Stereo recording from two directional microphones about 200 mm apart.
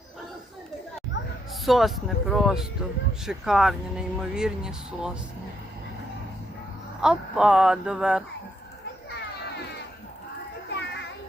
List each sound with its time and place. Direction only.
1.6 s speech: centre (ahead or behind)
7.0 s speech: 5° right (ahead or behind)
10.7 s children playing: 60° left (ahead or behind)